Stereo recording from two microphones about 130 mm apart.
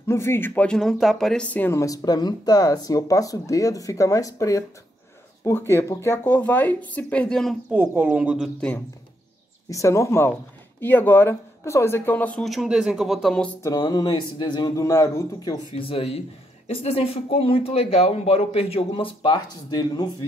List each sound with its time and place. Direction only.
0.0 s speech: 20° left (ahead or behind)
7.7 s a woman's voice: 15° right (ahead or behind)
8.5 s speech: 10° left (ahead or behind)
9.7 s speech: 25° left (ahead or behind)
12.4 s speech: 5° right (ahead or behind)
13.6 s speech: 30° left (ahead or behind)
15.7 s speech: 45° left (ahead or behind)